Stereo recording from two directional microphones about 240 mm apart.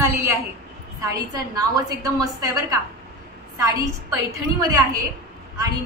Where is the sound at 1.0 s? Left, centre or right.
Centre.